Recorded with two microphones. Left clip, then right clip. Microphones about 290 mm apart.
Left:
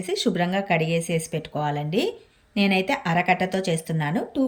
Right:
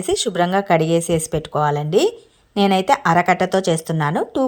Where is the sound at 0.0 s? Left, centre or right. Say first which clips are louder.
Right 6 dB; centre.